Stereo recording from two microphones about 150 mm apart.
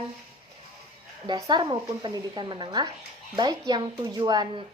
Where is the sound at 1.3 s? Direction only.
30° right (ahead or behind).